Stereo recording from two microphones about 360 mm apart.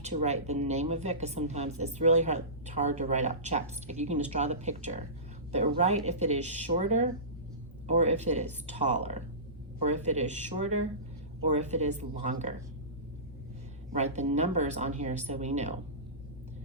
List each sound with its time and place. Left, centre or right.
0.0 s speech: centre
13.9 s speech: centre